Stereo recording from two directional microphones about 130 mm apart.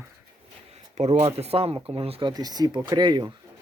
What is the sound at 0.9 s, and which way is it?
Speech, 50° right (ahead or behind).